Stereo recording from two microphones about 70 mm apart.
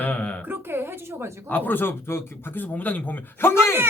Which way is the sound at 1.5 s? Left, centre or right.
Left.